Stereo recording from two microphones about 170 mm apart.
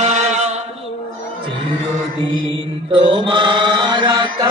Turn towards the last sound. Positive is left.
turn(degrees=-25)  # may be behind; listen again after turning